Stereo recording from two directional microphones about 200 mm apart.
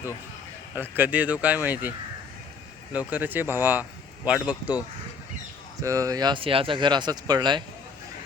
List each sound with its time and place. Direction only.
0.8 s speech: 10° right (ahead or behind)
2.9 s speech: 5° right (ahead or behind)
5.8 s speech: 15° right (ahead or behind)